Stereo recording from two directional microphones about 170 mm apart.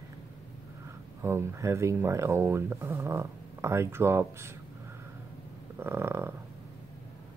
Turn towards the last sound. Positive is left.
turn(degrees=-15)  # may be behind; listen again after turning